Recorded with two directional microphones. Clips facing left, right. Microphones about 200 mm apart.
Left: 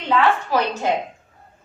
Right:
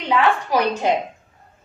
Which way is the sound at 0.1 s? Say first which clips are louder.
Even; 15° right (ahead or behind).